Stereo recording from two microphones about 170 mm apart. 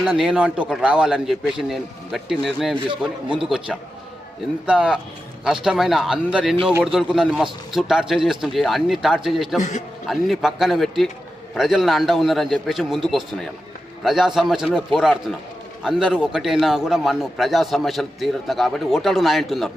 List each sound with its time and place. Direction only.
0.0 s a man's voice: 5° right (ahead or behind)
9.6 s a man's voice: 45° left (ahead or behind)
10.1 s a man's voice: centre (ahead or behind)